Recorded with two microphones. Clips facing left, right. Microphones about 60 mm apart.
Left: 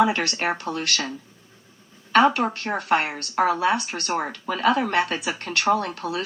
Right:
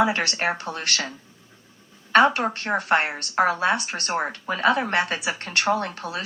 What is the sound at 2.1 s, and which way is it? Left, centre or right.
Speech, right.